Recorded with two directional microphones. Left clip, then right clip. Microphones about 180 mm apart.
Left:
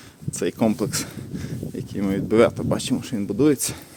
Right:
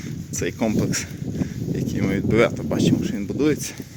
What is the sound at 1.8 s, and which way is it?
Speech, 10° left (ahead or behind).